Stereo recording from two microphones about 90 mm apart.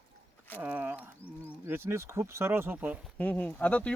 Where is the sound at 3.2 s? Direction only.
15° left (ahead or behind).